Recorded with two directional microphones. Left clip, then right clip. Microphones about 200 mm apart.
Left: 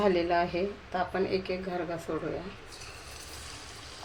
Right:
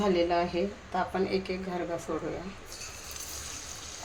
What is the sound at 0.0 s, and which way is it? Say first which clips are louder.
Speech: even; 20° left (ahead or behind).